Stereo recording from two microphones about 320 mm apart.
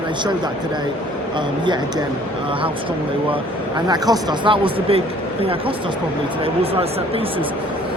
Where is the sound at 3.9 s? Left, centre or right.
Centre.